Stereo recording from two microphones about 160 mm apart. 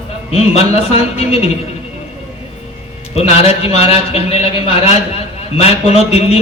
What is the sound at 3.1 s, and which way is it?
A man's voice, 40° left (ahead or behind).